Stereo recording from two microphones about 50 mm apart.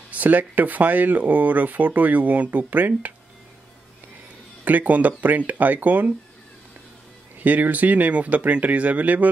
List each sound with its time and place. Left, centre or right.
0.1 s speech: right
4.6 s speech: right
7.3 s speech: right